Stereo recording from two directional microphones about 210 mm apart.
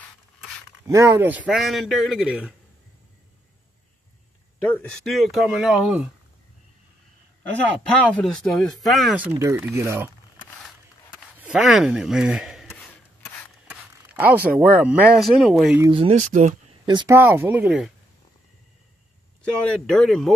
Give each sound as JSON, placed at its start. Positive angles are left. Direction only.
{"t": 0.8, "sound": "speech", "side_deg": -15}
{"t": 4.6, "sound": "speech", "side_deg": 5}
{"t": 8.0, "sound": "speech", "side_deg": 5}
{"t": 11.1, "sound": "speech", "side_deg": -5}
{"t": 12.6, "sound": "rub", "side_deg": 5}
{"t": 13.7, "sound": "a sound", "side_deg": -10}
{"t": 14.6, "sound": "speech", "side_deg": -10}
{"t": 15.9, "sound": "speech", "side_deg": -30}
{"t": 16.8, "sound": "speech", "side_deg": -20}
{"t": 17.2, "sound": "speech", "side_deg": -10}
{"t": 19.4, "sound": "speech", "side_deg": 5}